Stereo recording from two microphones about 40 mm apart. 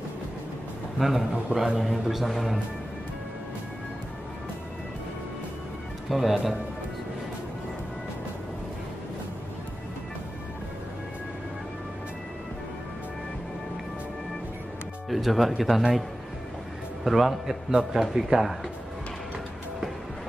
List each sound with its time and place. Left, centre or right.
0.9 s a man's voice: centre
6.0 s speech: centre
15.0 s speech: centre
17.0 s speech: centre
17.6 s speech: centre